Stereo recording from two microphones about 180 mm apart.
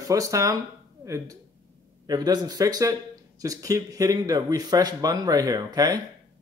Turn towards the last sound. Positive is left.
turn(degrees=-20)  # may be behind; listen again after turning